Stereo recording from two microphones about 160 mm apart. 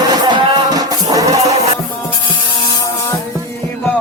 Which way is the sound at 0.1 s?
25° right (ahead or behind).